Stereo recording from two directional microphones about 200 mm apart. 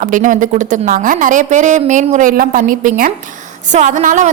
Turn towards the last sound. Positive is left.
turn(degrees=-40)  # may be behind; listen again after turning